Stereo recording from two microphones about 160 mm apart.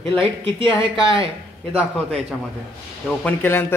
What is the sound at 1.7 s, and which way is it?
A woman's voice, 5° left (ahead or behind).